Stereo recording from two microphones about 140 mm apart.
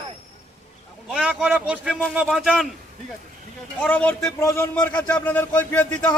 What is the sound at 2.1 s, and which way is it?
Speech, 5° right (ahead or behind).